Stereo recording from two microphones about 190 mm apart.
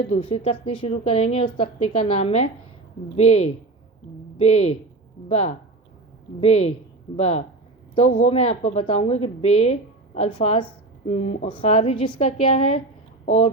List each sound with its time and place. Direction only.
0.0 s a woman's voice: 30° left (ahead or behind)
6.4 s a woman's voice: 30° left (ahead or behind)